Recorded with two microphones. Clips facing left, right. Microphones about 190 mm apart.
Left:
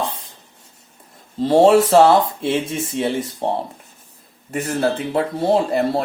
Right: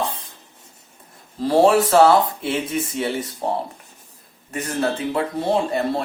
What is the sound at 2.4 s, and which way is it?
A man's voice, 25° left (ahead or behind).